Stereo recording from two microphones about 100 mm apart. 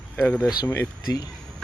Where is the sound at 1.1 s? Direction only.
40° left (ahead or behind).